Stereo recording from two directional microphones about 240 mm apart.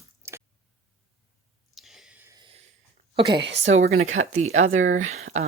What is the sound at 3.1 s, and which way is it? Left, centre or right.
Speech, right.